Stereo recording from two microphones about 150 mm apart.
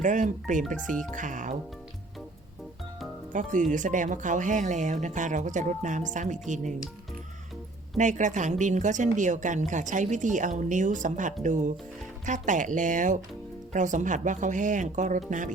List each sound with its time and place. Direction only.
0.0 s speech: 55° right (ahead or behind)
3.3 s speech: 60° right (ahead or behind)
7.9 s speech: 55° right (ahead or behind)